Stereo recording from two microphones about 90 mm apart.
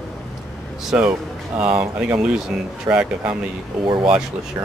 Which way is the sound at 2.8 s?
10° right (ahead or behind).